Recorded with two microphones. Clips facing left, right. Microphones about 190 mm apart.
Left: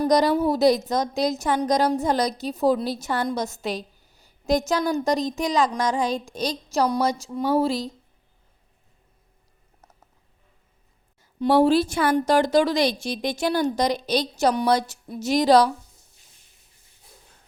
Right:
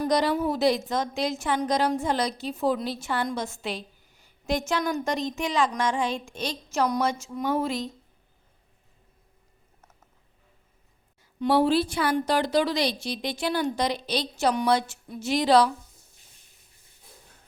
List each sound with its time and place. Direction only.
0.0 s a woman's voice: 40° left (ahead or behind)
11.3 s a woman's voice: 40° left (ahead or behind)